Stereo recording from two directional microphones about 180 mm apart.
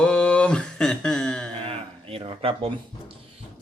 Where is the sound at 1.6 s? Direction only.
30° right (ahead or behind).